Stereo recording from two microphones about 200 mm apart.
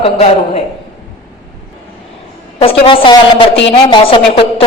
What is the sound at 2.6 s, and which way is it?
A woman's voice, 25° left (ahead or behind).